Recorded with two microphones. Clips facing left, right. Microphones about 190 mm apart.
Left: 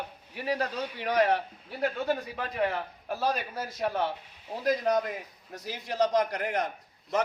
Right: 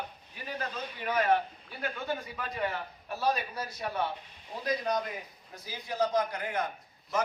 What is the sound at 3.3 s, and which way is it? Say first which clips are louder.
Speech: left 2 dB; 50° left (ahead or behind).